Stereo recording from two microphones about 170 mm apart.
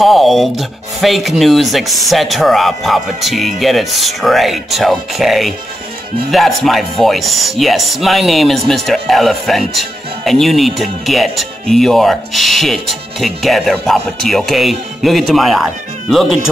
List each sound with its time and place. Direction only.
0.0 s speech: centre (ahead or behind)